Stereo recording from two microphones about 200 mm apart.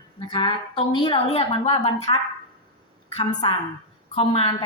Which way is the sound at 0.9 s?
25° left (ahead or behind).